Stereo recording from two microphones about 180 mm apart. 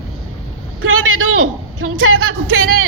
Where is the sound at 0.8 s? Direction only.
90° right.